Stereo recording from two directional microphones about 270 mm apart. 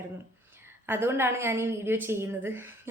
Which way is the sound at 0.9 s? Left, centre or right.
Centre.